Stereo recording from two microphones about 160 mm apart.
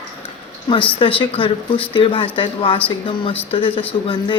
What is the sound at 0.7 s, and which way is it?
Speech, 35° left (ahead or behind).